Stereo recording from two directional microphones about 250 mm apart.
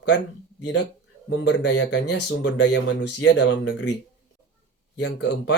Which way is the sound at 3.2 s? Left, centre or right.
Left.